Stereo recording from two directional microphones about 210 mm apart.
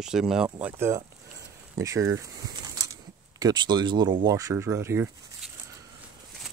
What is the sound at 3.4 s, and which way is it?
Speech, 20° right (ahead or behind).